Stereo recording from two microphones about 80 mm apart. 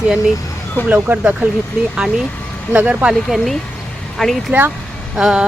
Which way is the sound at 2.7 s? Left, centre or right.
Centre.